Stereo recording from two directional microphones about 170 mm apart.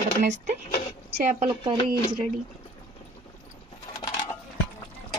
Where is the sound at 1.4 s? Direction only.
30° right (ahead or behind).